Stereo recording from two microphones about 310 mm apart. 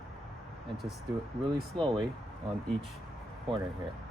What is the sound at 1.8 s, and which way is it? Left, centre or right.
Speech, centre.